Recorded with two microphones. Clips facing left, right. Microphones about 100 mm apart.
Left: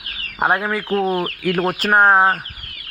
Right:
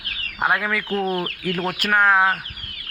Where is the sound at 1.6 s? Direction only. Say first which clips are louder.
Left 4 dB; 35° left (ahead or behind).